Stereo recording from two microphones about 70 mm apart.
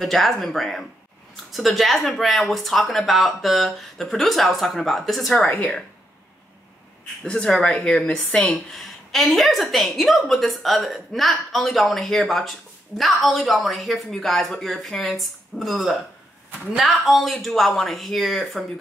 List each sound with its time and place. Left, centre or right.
0.0 s a woman's voice: centre
7.2 s speech: centre
8.5 s a woman's voice: centre